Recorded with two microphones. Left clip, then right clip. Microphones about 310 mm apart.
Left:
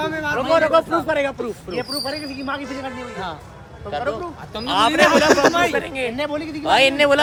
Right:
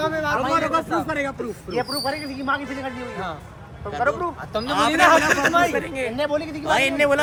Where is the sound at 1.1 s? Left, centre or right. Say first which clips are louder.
Left 5 dB; left.